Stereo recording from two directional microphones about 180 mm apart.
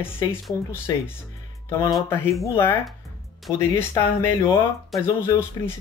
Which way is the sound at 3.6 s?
15° left (ahead or behind).